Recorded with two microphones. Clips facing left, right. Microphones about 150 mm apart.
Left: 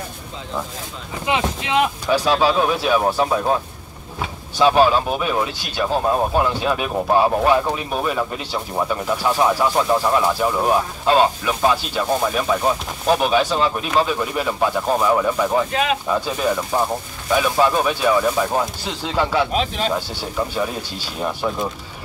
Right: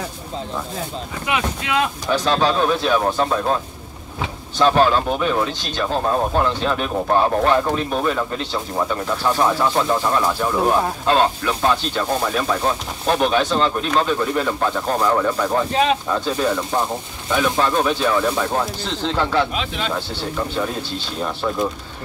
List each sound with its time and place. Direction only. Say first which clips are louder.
1.2 s speech: left 2 dB; 25° left (ahead or behind)
2.0 s speech: even; 10° left (ahead or behind)
4.6 s speech: left 1 dB; 10° left (ahead or behind)
19.5 s speech: left 4 dB; 40° left (ahead or behind)
20.2 s speech: even; 10° left (ahead or behind)